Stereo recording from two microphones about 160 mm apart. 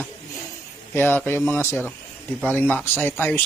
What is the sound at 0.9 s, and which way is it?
Speech, 15° left (ahead or behind).